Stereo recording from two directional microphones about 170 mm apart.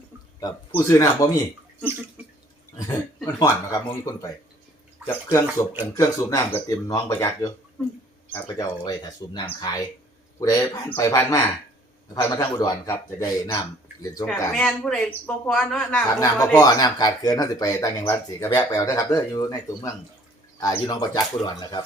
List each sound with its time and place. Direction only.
0.3 s speech: 20° left (ahead or behind)
2.7 s speech: 20° left (ahead or behind)
14.5 s speech: 5° left (ahead or behind)
16.6 s speech: 20° left (ahead or behind)